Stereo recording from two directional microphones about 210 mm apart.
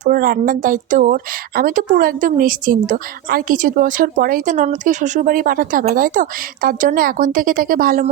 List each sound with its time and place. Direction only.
0.0 s a woman's voice: 40° right (ahead or behind)